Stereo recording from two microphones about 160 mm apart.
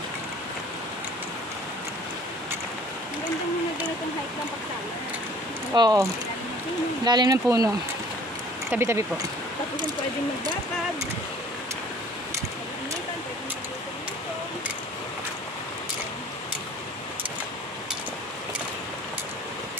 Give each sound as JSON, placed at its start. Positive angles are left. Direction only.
{"t": 5.8, "sound": "speech", "side_deg": -25}
{"t": 7.1, "sound": "speech", "side_deg": -25}